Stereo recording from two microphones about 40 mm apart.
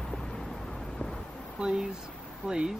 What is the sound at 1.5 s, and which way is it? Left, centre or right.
Speech, right.